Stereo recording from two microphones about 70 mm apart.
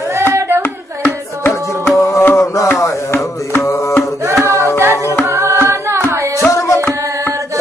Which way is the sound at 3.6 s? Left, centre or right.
Left.